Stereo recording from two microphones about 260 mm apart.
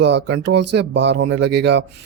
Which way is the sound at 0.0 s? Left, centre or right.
Right.